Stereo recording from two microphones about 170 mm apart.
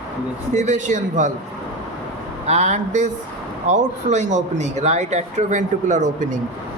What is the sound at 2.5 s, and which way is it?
Speech, 40° right (ahead or behind).